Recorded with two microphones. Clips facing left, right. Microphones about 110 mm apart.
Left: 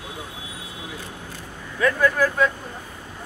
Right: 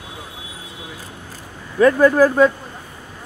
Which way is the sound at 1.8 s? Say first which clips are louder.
Right 8 dB; 35° right (ahead or behind).